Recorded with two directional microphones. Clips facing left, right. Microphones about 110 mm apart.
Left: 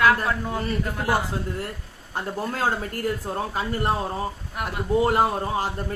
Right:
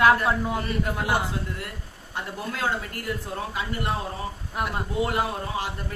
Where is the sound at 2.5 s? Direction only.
40° left (ahead or behind).